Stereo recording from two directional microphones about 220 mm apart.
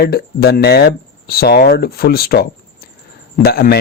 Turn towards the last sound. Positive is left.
turn(degrees=45)  # may be behind; listen again after turning